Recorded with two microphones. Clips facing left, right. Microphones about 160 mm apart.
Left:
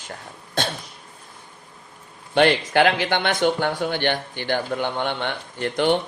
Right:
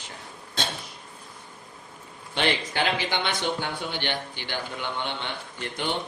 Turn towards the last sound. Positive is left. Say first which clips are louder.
# left 10 dB
turn(degrees=60)  # may be behind; listen again after turning